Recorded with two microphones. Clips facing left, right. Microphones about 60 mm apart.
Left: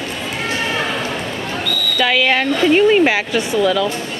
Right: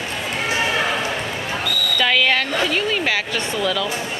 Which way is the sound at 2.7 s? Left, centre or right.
Left.